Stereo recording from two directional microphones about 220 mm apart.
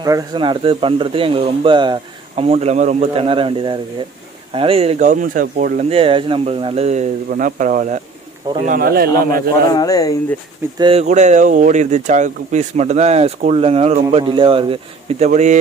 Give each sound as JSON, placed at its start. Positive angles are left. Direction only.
{"t": 0.0, "sound": "speech", "side_deg": -20}
{"t": 9.7, "sound": "speech", "side_deg": 15}
{"t": 10.8, "sound": "speech", "side_deg": -25}